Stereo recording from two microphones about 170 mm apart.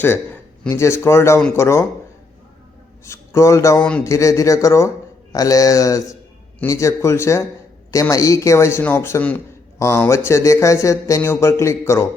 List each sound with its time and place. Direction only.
0.7 s a man's voice: 15° left (ahead or behind)
3.0 s a man's voice: 15° left (ahead or behind)